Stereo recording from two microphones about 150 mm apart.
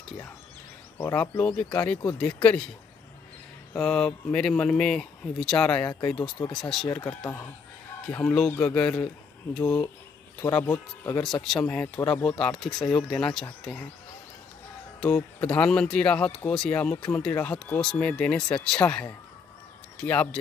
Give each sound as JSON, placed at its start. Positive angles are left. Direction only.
{"t": 0.9, "sound": "speech", "side_deg": 15}
{"t": 3.8, "sound": "speech", "side_deg": 5}
{"t": 5.9, "sound": "speech", "side_deg": 20}
{"t": 6.5, "sound": "speech", "side_deg": 0}
{"t": 6.9, "sound": "speech", "side_deg": 15}
{"t": 9.6, "sound": "speech", "side_deg": 20}
{"t": 15.0, "sound": "speech", "side_deg": 5}